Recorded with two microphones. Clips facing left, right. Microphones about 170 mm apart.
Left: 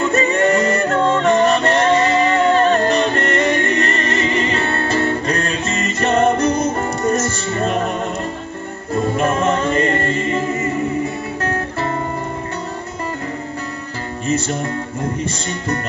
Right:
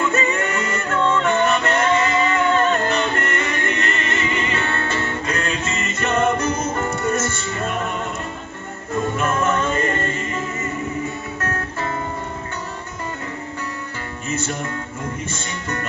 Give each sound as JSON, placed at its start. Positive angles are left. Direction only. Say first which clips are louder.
{"t": 0.1, "sound": "music", "louder": "left 6 dB", "side_deg": 35}
{"t": 9.2, "sound": "music", "louder": "left 3 dB", "side_deg": 30}
{"t": 11.4, "sound": "music", "louder": "left 4 dB", "side_deg": 30}
{"t": 14.3, "sound": "music", "louder": "left 6 dB", "side_deg": 35}